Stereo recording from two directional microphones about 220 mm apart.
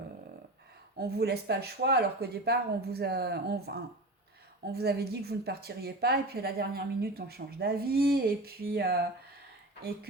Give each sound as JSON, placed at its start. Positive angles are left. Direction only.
{"t": 0.9, "sound": "a woman's voice", "side_deg": -45}